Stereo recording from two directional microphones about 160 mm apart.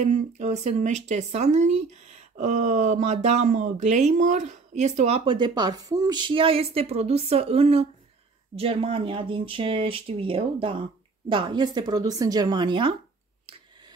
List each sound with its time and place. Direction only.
0.0 s speech: 45° right (ahead or behind)